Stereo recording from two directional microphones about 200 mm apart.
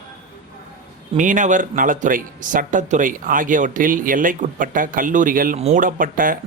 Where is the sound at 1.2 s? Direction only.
40° right (ahead or behind).